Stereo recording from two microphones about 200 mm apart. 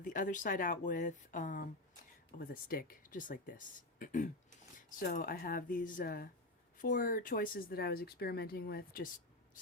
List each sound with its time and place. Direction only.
0.0 s speech: 40° left (ahead or behind)